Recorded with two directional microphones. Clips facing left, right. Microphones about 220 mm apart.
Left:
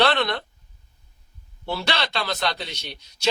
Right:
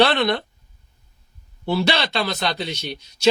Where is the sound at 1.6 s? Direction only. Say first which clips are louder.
Right 6 dB; 15° right (ahead or behind).